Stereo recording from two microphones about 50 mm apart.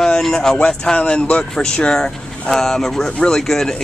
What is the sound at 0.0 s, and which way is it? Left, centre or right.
Speech, centre.